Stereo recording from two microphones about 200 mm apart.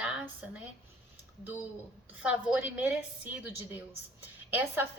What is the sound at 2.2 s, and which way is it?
A woman's voice, 5° right (ahead or behind).